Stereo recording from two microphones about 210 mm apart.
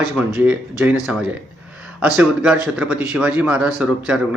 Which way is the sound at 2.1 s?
5° right (ahead or behind).